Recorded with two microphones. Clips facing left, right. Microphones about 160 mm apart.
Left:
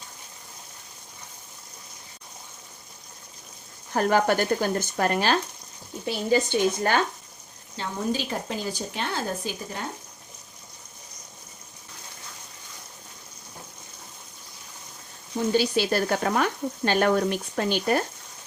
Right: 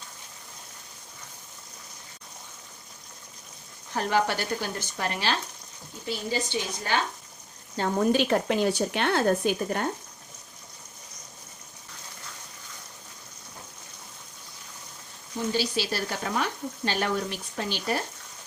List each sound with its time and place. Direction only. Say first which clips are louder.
3.9 s speech: left 4 dB; 50° left (ahead or behind)
7.8 s a woman's voice: right 5 dB; 60° right (ahead or behind)
15.5 s speech: left 7 dB; 55° left (ahead or behind)